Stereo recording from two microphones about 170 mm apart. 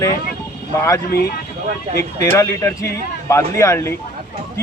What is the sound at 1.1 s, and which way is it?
Speech, 65° left (ahead or behind).